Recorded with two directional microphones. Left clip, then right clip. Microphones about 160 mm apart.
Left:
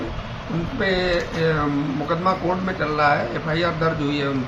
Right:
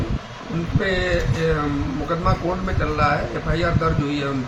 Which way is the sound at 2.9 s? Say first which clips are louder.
Left 2 dB; 10° right (ahead or behind).